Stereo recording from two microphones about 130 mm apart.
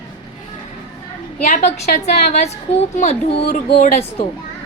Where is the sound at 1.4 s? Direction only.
65° left (ahead or behind).